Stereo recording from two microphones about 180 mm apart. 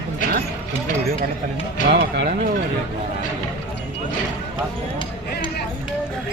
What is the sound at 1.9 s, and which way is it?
Speech, 55° right (ahead or behind).